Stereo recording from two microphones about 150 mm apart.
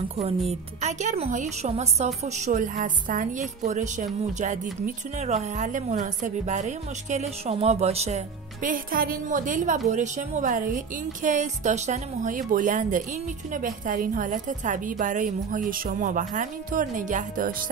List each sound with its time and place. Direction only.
0.2 s a woman's voice: 45° right (ahead or behind)
8.6 s a woman's voice: 70° right (ahead or behind)